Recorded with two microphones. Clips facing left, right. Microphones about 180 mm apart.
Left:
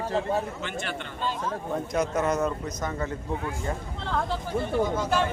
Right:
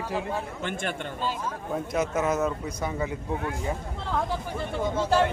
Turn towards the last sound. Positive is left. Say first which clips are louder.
# right 2 dB
turn(degrees=-30)  # may be behind; listen again after turning